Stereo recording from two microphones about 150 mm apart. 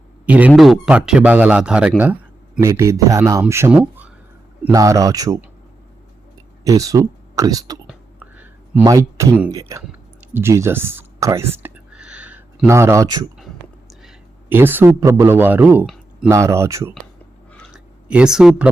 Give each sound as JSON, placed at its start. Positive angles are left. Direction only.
{"t": 0.3, "sound": "speech", "side_deg": -10}
{"t": 2.6, "sound": "speech", "side_deg": -20}
{"t": 3.8, "sound": "a sound", "side_deg": -10}
{"t": 4.7, "sound": "speech", "side_deg": -25}
{"t": 6.7, "sound": "speech", "side_deg": -20}
{"t": 8.2, "sound": "a sound", "side_deg": -10}
{"t": 8.8, "sound": "speech", "side_deg": -20}
{"t": 14.5, "sound": "speech", "side_deg": -15}
{"t": 17.7, "sound": "a sound", "side_deg": -5}